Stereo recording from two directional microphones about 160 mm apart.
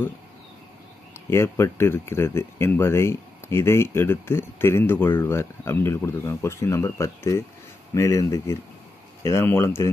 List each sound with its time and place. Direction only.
1.3 s speech: 15° left (ahead or behind)